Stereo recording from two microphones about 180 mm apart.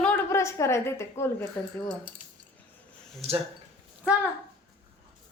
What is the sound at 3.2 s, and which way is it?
Speech, 35° right (ahead or behind).